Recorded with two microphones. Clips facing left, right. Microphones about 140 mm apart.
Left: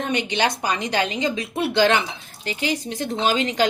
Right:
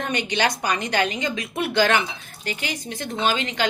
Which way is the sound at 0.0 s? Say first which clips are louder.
Left 1 dB; 25° left (ahead or behind).